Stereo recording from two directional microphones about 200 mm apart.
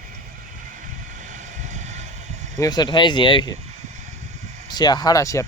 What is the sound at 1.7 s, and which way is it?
Vehicle, 35° right (ahead or behind).